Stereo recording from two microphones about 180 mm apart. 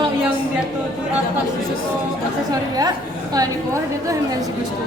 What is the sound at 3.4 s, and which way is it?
Speech, 20° right (ahead or behind).